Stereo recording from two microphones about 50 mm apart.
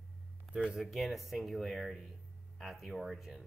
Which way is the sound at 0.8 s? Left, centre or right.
Centre.